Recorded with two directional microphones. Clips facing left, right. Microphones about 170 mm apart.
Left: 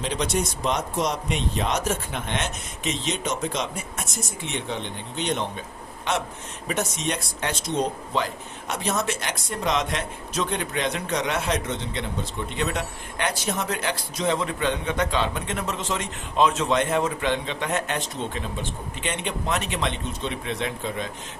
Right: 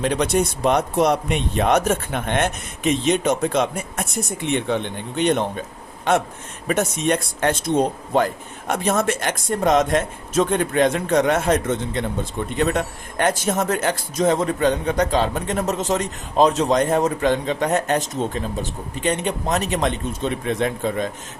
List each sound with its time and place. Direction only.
0.0 s speech: 55° right (ahead or behind)